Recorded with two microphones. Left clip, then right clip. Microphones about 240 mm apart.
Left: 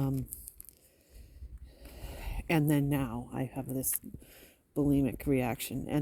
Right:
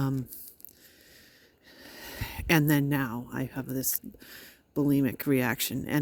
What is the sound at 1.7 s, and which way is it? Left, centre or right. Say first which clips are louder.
Speech: right 7 dB; right.